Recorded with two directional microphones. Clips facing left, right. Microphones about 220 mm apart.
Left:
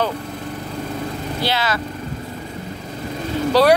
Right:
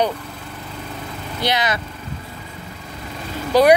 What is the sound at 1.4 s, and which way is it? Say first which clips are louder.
Speech: right 1 dB; 20° right (ahead or behind).